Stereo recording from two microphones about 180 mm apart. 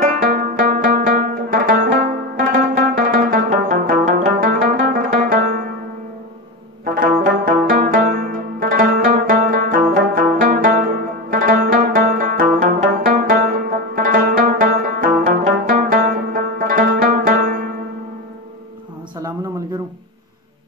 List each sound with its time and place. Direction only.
0.0 s music: 50° right (ahead or behind)
6.8 s music: 50° right (ahead or behind)
7.9 s zither: 50° right (ahead or behind)
9.1 s music: 50° right (ahead or behind)